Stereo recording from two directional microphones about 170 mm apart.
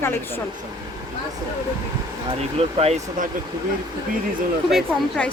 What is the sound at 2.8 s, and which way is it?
Speech, 40° right (ahead or behind).